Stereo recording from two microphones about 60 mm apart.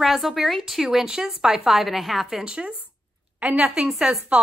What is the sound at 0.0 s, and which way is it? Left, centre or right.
Speech, centre.